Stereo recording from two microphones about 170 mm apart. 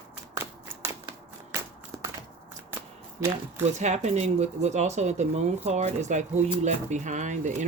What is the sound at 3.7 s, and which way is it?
Speech, 40° right (ahead or behind).